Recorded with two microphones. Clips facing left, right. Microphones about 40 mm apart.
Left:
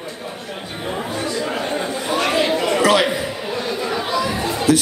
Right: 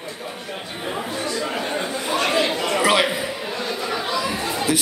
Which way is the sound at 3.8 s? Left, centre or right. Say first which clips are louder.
Left 3 dB; centre.